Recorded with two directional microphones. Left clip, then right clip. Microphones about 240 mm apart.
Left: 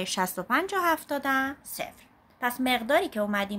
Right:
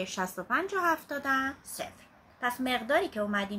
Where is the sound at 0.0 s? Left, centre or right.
Left.